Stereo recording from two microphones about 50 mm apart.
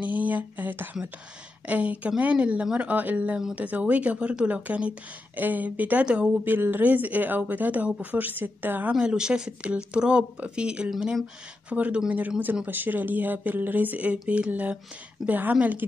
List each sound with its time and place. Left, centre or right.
0.0 s speech: right
6.0 s speech: right
6.4 s speech: right
9.0 s speech: centre
12.6 s speech: right